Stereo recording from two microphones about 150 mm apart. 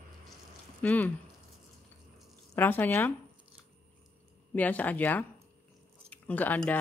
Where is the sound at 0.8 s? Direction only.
10° left (ahead or behind).